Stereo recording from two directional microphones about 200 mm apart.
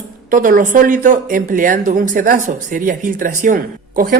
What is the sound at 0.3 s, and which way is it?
Speech, 40° right (ahead or behind).